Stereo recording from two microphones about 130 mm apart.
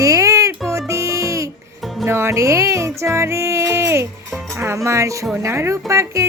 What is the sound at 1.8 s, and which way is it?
Music, centre (ahead or behind).